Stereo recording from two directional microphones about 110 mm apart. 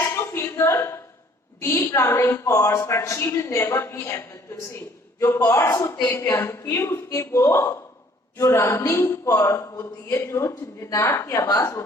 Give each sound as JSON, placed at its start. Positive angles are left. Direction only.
{"t": 0.0, "sound": "a sound", "side_deg": 20}
{"t": 1.6, "sound": "speech", "side_deg": 25}
{"t": 5.7, "sound": "speech", "side_deg": 30}